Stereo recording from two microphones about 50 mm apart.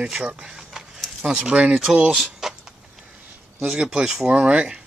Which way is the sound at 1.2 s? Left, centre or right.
Centre.